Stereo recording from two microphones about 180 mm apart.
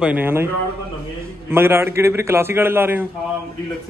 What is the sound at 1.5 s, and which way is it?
A man's voice, 15° right (ahead or behind).